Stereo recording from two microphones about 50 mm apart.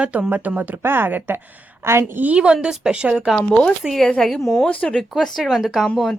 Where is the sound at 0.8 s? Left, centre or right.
Right.